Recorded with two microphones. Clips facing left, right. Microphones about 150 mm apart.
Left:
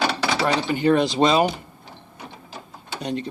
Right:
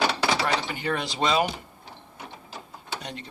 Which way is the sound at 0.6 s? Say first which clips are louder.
Left 11 dB; 25° left (ahead or behind).